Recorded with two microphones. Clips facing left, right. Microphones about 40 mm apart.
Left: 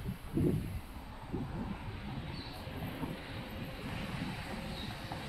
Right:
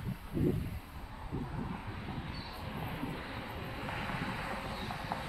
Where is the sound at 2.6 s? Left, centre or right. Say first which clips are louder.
Right 2 dB; centre.